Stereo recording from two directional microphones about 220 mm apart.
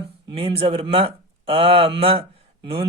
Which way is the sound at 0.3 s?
25° right (ahead or behind).